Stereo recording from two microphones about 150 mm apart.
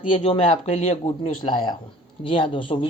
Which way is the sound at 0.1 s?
40° left (ahead or behind).